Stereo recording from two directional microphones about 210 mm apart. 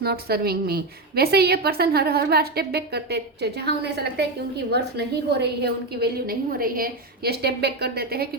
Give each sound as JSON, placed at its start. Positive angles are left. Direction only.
{"t": 0.0, "sound": "a woman's voice", "side_deg": -50}